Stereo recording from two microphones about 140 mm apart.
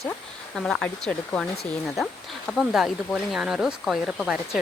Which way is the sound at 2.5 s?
Centre (ahead or behind).